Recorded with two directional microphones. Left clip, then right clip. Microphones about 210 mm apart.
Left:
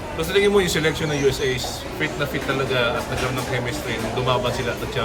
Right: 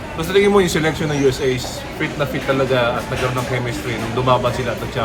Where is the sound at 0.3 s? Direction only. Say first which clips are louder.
Right 4 dB; 20° right (ahead or behind).